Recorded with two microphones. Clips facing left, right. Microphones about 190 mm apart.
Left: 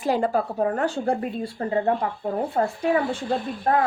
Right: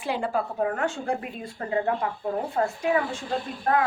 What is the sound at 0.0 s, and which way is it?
A woman's voice, 40° left (ahead or behind).